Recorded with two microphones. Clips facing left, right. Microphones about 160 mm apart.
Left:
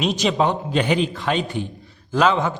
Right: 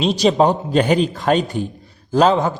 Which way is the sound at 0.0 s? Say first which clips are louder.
Right 5 dB; 35° right (ahead or behind).